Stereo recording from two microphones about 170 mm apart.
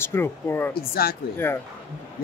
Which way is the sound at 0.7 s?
60° left (ahead or behind).